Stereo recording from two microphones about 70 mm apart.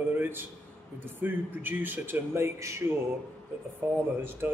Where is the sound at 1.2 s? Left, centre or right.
Right.